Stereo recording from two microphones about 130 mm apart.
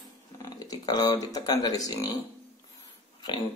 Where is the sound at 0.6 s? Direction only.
30° left (ahead or behind).